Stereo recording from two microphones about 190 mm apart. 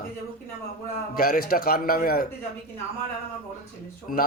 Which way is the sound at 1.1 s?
50° left (ahead or behind).